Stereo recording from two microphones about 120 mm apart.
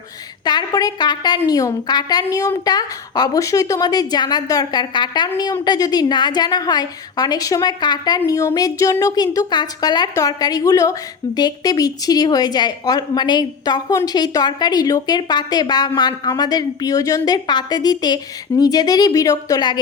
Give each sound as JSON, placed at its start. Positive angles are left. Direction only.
{"t": 0.4, "sound": "a woman's voice", "side_deg": 35}